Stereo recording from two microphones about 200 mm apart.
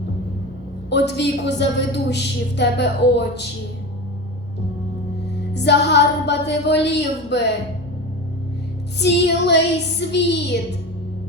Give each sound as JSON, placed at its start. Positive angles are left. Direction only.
{"t": 0.9, "sound": "a woman's voice", "side_deg": 60}
{"t": 5.5, "sound": "a woman's voice", "side_deg": 60}
{"t": 9.0, "sound": "a woman's voice", "side_deg": 60}